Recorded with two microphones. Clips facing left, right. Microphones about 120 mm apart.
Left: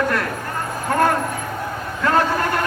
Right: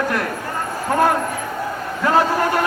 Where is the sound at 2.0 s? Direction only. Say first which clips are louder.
Right 2 dB; 10° right (ahead or behind).